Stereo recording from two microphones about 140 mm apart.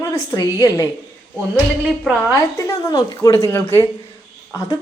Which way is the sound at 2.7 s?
25° left (ahead or behind).